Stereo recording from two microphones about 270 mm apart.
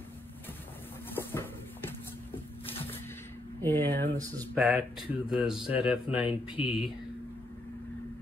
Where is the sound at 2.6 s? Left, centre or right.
Centre.